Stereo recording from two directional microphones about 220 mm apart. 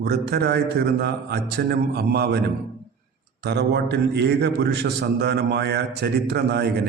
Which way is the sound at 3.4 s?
50° right (ahead or behind).